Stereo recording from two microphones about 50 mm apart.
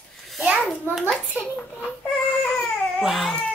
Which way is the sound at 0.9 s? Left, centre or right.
Right.